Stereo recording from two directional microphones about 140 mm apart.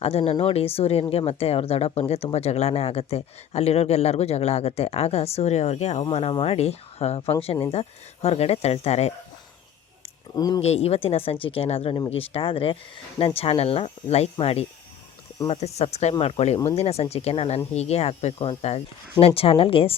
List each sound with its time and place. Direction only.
0.0 s speech: 45° left (ahead or behind)
10.3 s speech: 30° left (ahead or behind)
10.6 s speech: 50° left (ahead or behind)